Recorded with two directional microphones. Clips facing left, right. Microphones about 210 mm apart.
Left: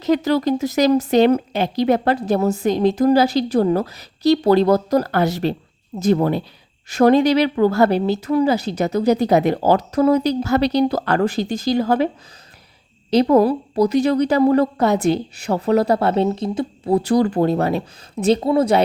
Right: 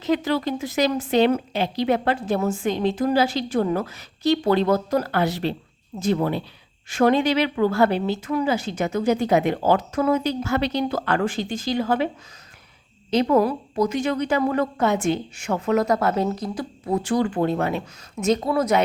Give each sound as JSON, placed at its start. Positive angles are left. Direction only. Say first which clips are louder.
{"t": 0.0, "sound": "a woman's voice", "louder": "left 5 dB", "side_deg": 40}
{"t": 13.1, "sound": "a woman's voice", "louder": "left 5 dB", "side_deg": 35}